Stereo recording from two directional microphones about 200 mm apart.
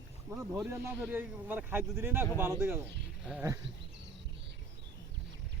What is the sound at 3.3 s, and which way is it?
Speech, 5° right (ahead or behind).